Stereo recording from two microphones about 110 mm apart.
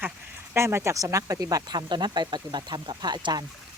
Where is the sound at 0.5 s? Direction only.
25° right (ahead or behind).